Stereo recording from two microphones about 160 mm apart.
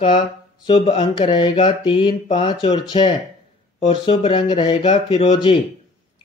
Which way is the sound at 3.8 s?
30° left (ahead or behind).